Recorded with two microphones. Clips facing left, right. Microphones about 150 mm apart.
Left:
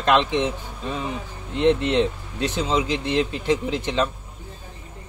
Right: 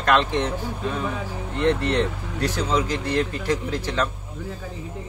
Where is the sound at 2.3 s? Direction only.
20° left (ahead or behind).